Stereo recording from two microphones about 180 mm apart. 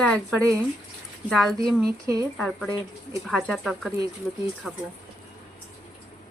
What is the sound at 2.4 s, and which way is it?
Speech, 5° left (ahead or behind).